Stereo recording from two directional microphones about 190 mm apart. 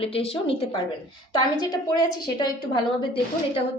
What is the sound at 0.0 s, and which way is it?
Speech, 30° left (ahead or behind).